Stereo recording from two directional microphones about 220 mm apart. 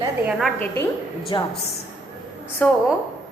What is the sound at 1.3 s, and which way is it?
Speech, 20° left (ahead or behind).